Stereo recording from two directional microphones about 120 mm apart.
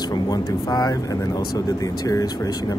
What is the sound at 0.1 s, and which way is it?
Speech, 30° left (ahead or behind).